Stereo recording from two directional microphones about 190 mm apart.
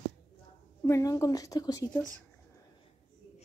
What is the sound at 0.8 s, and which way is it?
Speech, 15° left (ahead or behind).